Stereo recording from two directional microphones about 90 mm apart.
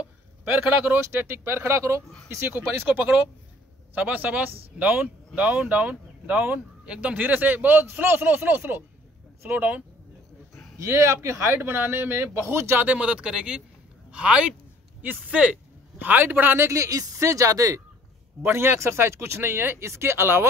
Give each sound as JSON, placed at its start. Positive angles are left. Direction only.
{"t": 0.0, "sound": "a sound", "side_deg": -20}
{"t": 1.1, "sound": "speech", "side_deg": -25}
{"t": 2.4, "sound": "speech", "side_deg": -20}
{"t": 10.8, "sound": "speech", "side_deg": -30}
{"t": 18.4, "sound": "speech", "side_deg": -25}